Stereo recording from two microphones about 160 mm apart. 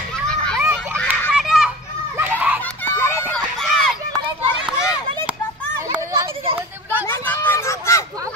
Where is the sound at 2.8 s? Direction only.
15° left (ahead or behind); by 5.3 s 5° right (ahead or behind).